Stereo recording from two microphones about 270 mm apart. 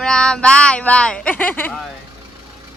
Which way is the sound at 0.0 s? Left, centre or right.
Centre.